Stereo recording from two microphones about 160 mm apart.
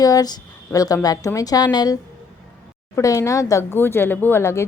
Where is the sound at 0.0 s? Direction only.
25° left (ahead or behind).